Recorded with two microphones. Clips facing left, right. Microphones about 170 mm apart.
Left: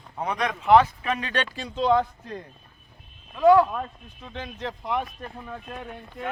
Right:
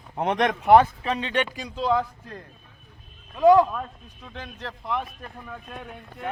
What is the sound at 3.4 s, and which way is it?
Speech, 20° right (ahead or behind).